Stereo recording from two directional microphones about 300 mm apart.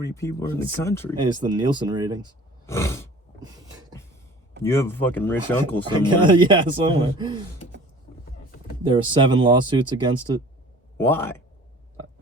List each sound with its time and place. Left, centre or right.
0.0 s speech: centre
1.1 s speech: centre
2.6 s a sound: centre
3.4 s a sound: centre
4.6 s speech: centre
5.9 s speech: centre
8.8 s speech: centre
10.9 s speech: centre